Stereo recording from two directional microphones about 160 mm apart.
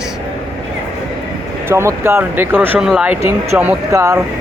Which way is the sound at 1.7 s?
15° right (ahead or behind).